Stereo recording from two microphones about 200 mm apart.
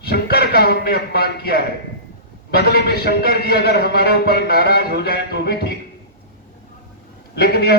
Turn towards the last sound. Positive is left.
turn(degrees=55)  # may be behind; listen again after turning